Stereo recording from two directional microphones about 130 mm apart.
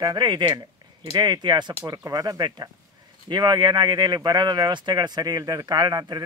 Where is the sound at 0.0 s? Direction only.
35° right (ahead or behind).